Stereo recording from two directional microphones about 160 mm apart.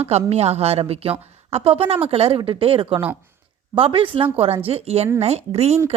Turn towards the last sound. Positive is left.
turn(degrees=-40)  # may be behind; listen again after turning